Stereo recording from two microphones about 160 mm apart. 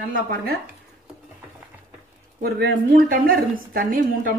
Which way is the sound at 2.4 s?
75° right (ahead or behind).